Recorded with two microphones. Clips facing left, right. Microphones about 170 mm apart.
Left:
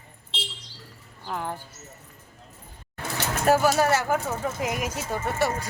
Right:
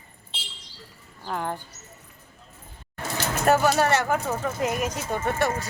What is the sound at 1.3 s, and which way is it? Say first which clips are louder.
Speech: right 2 dB; centre (ahead or behind).